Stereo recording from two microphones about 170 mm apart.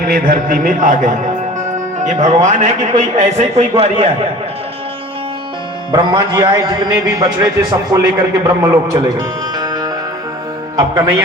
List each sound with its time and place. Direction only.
0.0 s a man's voice: 60° right (ahead or behind); by 4.1 s 35° right (ahead or behind)
5.9 s a man's voice: 25° right (ahead or behind)
9.6 s music: 20° right (ahead or behind)
10.8 s a man's voice: 20° right (ahead or behind)